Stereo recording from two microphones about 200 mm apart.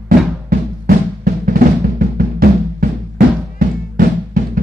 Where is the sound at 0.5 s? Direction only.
45° right (ahead or behind).